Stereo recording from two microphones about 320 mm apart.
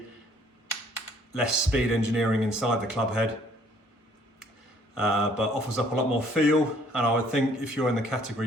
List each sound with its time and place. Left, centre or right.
1.4 s speech: centre
5.0 s speech: centre